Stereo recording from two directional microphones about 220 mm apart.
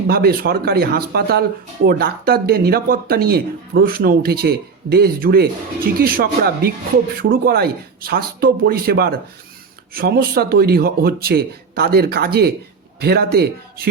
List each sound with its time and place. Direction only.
0.1 s speech: 45° right (ahead or behind)